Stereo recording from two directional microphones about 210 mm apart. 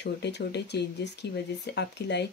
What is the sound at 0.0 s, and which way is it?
Speech, 55° left (ahead or behind).